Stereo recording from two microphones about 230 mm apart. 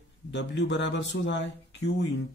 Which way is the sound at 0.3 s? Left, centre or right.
Left.